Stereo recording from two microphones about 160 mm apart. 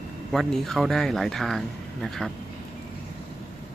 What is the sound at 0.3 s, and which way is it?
Speech, centre (ahead or behind).